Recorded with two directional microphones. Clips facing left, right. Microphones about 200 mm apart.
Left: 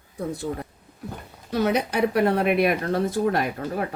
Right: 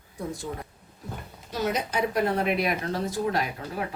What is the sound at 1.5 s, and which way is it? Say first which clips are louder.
Speech: left 5 dB; 60° left (ahead or behind).